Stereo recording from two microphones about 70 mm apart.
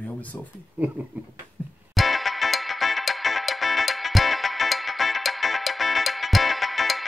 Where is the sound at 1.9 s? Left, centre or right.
Centre.